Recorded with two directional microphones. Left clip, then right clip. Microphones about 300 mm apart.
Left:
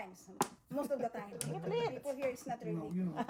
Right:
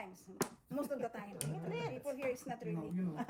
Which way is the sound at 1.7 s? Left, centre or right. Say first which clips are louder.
Left 5 dB; left.